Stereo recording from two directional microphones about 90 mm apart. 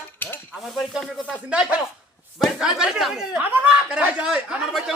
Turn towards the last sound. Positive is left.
turn(degrees=-5)  # may be behind; listen again after turning